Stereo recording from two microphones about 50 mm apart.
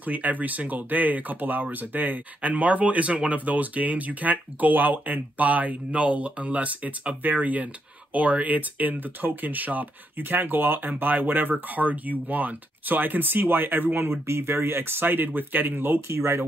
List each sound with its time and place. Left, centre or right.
0.0 s speech: right
16.1 s speech: right